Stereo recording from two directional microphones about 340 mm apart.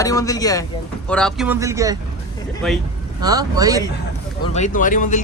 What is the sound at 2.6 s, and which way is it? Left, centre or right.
Speech, centre.